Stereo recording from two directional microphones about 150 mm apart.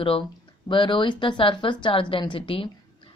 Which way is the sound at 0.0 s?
35° left (ahead or behind).